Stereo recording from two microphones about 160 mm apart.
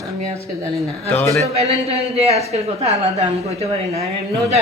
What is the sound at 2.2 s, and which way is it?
Speech, 40° right (ahead or behind).